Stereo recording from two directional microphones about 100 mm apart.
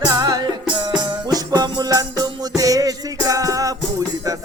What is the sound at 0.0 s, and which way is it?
Music, 40° right (ahead or behind).